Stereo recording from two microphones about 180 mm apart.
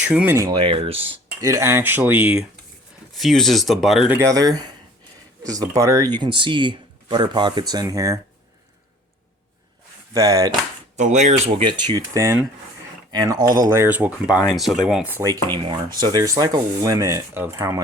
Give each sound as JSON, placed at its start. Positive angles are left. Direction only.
{"t": 0.1, "sound": "speech", "side_deg": -10}
{"t": 0.5, "sound": "speech", "side_deg": -30}
{"t": 1.4, "sound": "speech", "side_deg": -15}
{"t": 4.2, "sound": "speech", "side_deg": -20}
{"t": 10.1, "sound": "speech", "side_deg": -20}
{"t": 10.9, "sound": "speech", "side_deg": -40}
{"t": 15.5, "sound": "speech", "side_deg": -25}